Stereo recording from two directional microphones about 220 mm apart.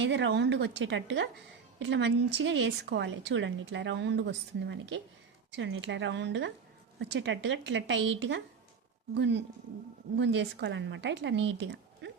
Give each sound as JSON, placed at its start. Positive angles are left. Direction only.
{"t": 0.0, "sound": "a woman's voice", "side_deg": -55}